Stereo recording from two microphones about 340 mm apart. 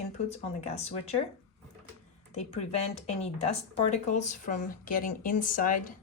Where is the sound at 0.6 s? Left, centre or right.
Centre.